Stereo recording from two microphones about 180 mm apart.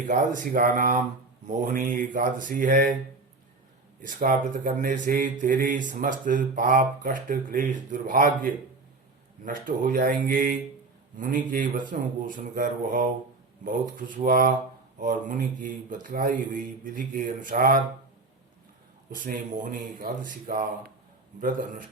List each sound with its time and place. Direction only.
0.1 s speech: 50° right (ahead or behind)
4.0 s speech: 50° right (ahead or behind)
19.1 s speech: 50° right (ahead or behind)